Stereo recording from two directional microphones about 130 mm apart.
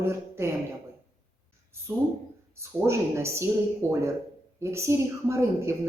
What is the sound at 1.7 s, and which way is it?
Speech, 20° right (ahead or behind).